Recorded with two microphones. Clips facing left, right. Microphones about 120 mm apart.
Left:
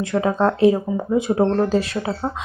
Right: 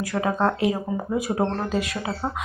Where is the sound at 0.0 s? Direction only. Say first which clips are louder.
Left 4 dB; 25° left (ahead or behind).